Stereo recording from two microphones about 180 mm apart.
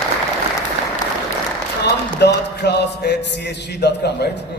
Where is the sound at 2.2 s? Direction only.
70° left (ahead or behind).